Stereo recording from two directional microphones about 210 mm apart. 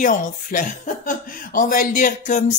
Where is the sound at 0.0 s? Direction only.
40° left (ahead or behind).